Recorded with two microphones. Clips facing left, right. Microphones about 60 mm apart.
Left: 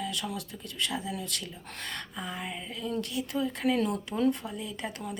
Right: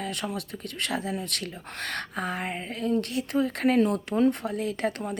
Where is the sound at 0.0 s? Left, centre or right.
Right.